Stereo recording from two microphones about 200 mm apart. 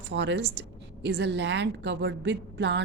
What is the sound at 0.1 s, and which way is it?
A woman's voice, 60° right (ahead or behind).